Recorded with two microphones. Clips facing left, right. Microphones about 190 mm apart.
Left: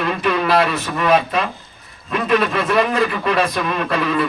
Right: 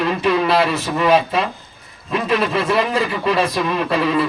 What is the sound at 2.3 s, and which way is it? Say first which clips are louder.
A man's voice: left 1 dB; 30° right (ahead or behind).